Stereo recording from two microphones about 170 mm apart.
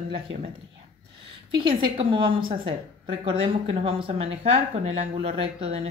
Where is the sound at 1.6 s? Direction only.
30° right (ahead or behind).